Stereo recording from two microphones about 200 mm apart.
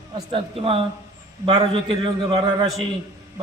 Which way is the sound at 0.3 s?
30° right (ahead or behind).